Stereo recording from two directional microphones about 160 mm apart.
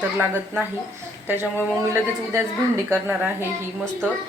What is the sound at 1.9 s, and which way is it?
A woman's voice, 20° right (ahead or behind).